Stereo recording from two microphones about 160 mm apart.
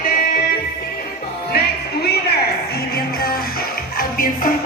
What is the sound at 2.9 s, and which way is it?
Music, 70° left (ahead or behind).